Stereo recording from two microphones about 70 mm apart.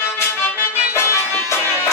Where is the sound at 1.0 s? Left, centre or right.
Left.